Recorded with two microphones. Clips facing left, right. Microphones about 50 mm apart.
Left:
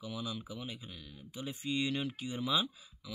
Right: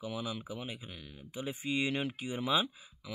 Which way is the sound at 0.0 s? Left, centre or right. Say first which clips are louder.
Right 2 dB; centre.